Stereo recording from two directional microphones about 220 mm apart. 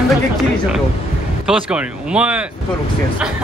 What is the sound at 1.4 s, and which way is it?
Speech, 5° right (ahead or behind).